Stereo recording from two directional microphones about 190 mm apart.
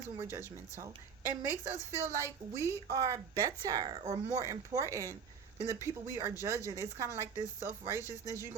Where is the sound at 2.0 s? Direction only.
15° right (ahead or behind); by 4.3 s 30° right (ahead or behind).